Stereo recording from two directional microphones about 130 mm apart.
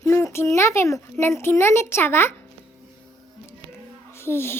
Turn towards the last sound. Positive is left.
turn(degrees=20)  # may be behind; listen again after turning